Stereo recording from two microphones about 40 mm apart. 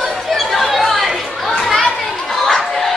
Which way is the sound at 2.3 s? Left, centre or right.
Centre.